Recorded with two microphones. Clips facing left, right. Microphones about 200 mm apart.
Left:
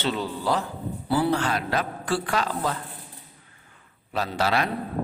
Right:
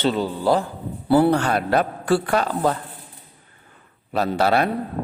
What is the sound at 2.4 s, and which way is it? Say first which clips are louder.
Speech: right 6 dB; 45° right (ahead or behind).